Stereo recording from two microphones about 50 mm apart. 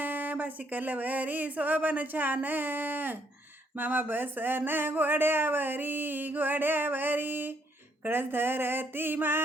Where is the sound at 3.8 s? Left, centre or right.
Right.